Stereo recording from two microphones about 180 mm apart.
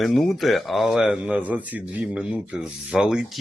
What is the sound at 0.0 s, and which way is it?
Speech, centre (ahead or behind).